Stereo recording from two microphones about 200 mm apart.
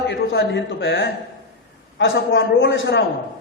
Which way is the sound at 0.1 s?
60° left (ahead or behind).